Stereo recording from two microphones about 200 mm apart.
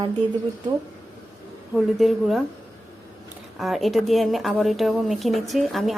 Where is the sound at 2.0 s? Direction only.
Centre (ahead or behind).